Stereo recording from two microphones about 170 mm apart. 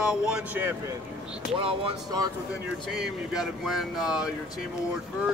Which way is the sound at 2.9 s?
Centre (ahead or behind).